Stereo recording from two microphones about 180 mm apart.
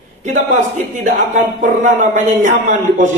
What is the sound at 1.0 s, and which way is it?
A man's voice, 45° right (ahead or behind).